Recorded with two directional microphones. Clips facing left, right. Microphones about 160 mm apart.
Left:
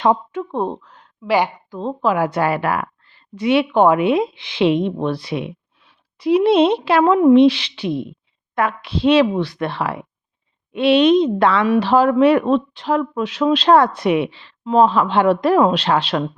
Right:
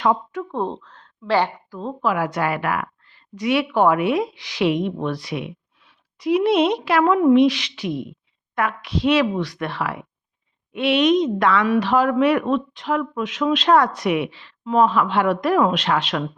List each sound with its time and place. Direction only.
0.0 s a woman's voice: 25° left (ahead or behind)
1.8 s a woman's voice: 30° left (ahead or behind)